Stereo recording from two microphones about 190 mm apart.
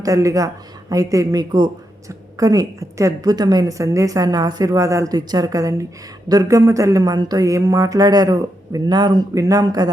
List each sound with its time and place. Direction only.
0.0 s speech: 15° right (ahead or behind)